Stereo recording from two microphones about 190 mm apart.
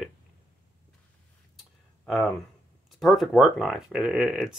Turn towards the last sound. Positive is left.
turn(degrees=-5)  # may be behind; listen again after turning